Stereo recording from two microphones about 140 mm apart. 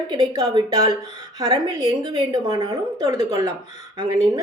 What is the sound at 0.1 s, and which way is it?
Speech, 30° right (ahead or behind).